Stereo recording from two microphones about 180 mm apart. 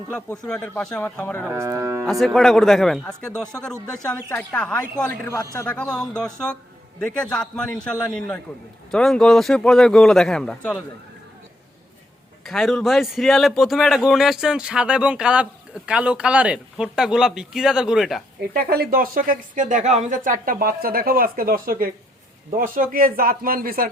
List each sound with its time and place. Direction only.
0.1 s speech: 5° left (ahead or behind)
1.5 s speech: 15° right (ahead or behind)
2.0 s a man's voice: centre (ahead or behind)
12.5 s a man's voice: centre (ahead or behind)
18.5 s speech: 60° right (ahead or behind)